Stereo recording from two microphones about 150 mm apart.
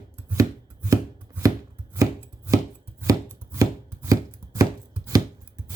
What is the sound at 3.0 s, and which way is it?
Chopping, 20° right (ahead or behind).